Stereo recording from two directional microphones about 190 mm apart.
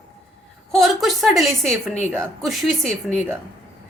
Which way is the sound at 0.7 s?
Centre (ahead or behind).